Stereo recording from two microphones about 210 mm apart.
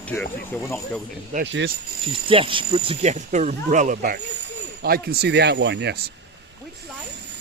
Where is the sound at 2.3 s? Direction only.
25° right (ahead or behind); by 6.1 s 55° right (ahead or behind).